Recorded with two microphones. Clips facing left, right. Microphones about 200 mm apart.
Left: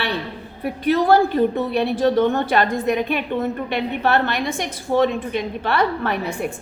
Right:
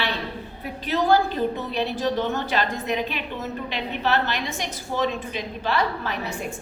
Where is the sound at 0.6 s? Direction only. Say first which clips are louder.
Left 6 dB; 60° left (ahead or behind).